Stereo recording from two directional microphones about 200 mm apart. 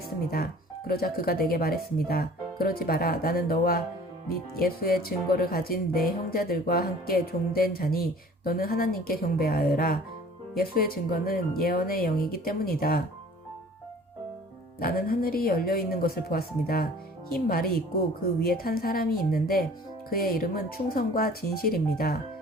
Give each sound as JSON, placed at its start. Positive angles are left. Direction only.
{"t": 0.9, "sound": "speech", "side_deg": 50}
{"t": 14.8, "sound": "speech", "side_deg": 50}